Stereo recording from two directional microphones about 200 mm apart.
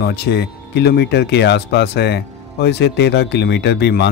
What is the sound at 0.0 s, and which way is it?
A man's voice, 55° left (ahead or behind).